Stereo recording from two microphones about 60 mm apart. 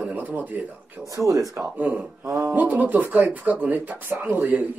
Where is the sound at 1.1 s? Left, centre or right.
Right.